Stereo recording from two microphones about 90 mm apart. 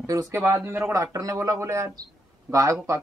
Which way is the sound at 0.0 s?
35° right (ahead or behind).